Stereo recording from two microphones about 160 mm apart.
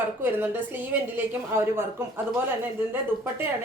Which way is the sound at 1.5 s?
15° right (ahead or behind).